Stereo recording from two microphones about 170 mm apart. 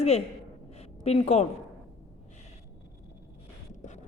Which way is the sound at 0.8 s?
40° left (ahead or behind).